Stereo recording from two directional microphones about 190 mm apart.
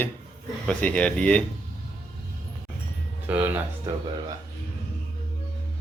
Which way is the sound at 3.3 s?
10° right (ahead or behind).